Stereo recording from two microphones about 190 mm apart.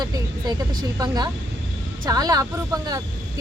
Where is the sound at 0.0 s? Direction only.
20° right (ahead or behind).